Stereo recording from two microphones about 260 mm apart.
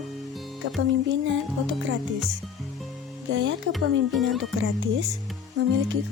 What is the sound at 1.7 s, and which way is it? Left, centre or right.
Speech, right.